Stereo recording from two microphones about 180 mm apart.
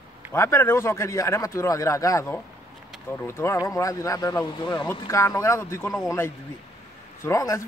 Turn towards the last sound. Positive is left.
turn(degrees=15)  # may be behind; listen again after turning